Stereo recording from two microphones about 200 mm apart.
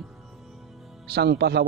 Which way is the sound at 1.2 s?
55° right (ahead or behind).